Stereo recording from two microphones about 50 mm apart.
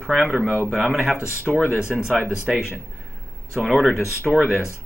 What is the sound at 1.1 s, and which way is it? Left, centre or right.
Speech, left.